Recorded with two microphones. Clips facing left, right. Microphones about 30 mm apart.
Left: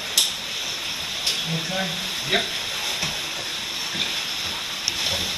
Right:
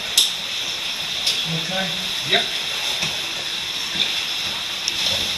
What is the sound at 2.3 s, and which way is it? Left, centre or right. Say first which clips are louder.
Speech: right 3 dB; centre.